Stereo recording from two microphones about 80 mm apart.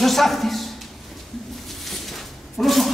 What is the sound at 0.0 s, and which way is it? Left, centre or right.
Speech, centre.